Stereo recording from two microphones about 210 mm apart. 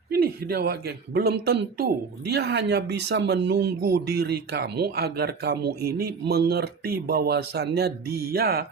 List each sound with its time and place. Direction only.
0.1 s a man's voice: 50° right (ahead or behind)